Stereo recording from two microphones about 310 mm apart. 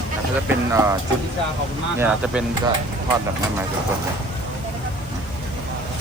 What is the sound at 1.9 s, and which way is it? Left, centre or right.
Speech, centre.